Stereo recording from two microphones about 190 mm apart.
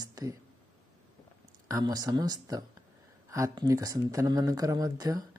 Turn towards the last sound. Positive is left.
turn(degrees=-20)  # may be behind; listen again after turning